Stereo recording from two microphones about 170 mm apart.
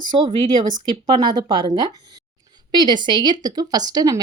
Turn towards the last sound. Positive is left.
turn(degrees=-25)  # may be behind; listen again after turning